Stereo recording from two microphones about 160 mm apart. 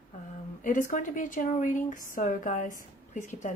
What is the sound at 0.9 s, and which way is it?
A woman's voice, 55° left (ahead or behind).